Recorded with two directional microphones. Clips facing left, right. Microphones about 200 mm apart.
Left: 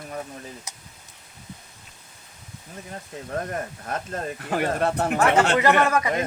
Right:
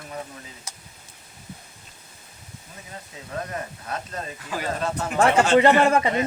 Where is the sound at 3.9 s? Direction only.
55° left (ahead or behind).